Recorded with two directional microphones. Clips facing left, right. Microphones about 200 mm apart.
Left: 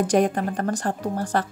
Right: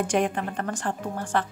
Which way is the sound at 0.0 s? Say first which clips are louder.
Left 4 dB; 40° left (ahead or behind).